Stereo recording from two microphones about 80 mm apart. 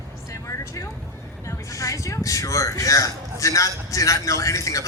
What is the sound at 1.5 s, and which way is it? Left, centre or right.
A man's voice, left.